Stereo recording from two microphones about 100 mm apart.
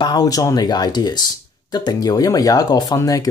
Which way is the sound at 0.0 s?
40° left (ahead or behind).